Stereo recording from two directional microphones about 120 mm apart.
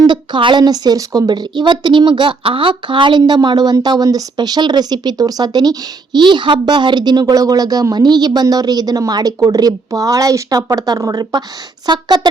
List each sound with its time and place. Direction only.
0.0 s a woman's voice: 40° right (ahead or behind)